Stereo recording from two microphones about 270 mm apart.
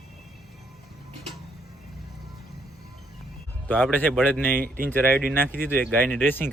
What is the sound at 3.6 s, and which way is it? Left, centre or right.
A man's voice, centre.